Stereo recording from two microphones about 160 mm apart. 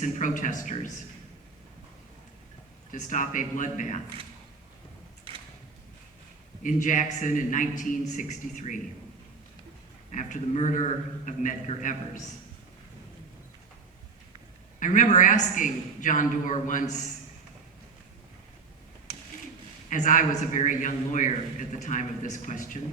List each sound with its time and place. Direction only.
0.0 s a man's voice: 55° left (ahead or behind)
2.9 s a man's voice: 55° left (ahead or behind)
5.3 s a sound: 35° right (ahead or behind)
6.6 s a man's voice: 55° left (ahead or behind)
10.1 s a man's voice: 50° left (ahead or behind)
14.8 s a man's voice: 50° left (ahead or behind)
19.9 s a man's voice: 55° left (ahead or behind)